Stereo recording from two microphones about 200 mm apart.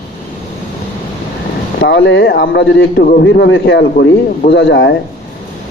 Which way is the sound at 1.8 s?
60° left (ahead or behind).